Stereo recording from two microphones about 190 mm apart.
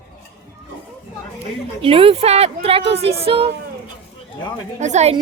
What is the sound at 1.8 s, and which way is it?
Speech, 30° right (ahead or behind).